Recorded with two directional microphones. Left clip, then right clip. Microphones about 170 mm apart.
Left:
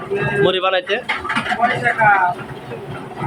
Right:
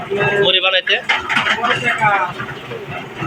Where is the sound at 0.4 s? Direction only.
40° left (ahead or behind).